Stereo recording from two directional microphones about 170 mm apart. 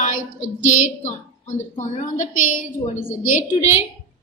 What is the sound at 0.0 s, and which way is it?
A woman's voice, 45° left (ahead or behind).